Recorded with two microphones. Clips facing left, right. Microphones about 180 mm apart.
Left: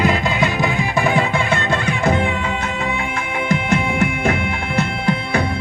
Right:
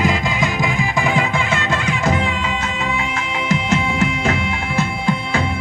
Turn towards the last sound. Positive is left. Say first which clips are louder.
# left 1 dB
turn(degrees=60)  # may be behind; listen again after turning